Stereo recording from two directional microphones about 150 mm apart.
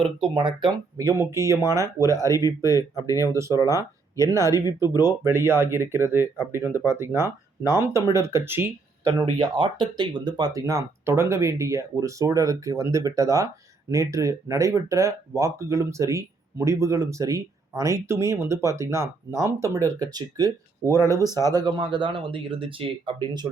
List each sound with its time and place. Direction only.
0.3 s speech: 30° right (ahead or behind)
9.4 s speech: 30° right (ahead or behind)
21.0 s speech: 20° left (ahead or behind)
21.5 s speech: 30° right (ahead or behind)